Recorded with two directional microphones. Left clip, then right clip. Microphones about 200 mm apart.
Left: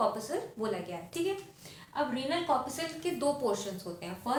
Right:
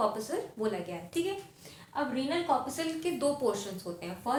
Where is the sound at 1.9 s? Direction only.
10° right (ahead or behind).